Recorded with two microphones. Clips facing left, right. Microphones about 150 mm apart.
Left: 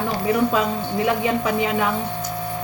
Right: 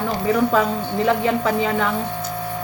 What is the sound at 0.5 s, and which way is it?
A woman's voice, 15° left (ahead or behind).